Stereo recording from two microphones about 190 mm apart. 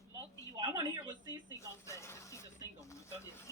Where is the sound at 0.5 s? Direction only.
20° right (ahead or behind).